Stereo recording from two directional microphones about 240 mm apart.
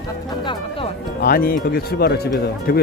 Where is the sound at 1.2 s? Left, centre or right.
Left.